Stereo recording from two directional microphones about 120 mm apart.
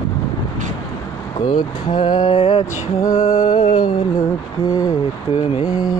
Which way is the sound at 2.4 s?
55° left (ahead or behind).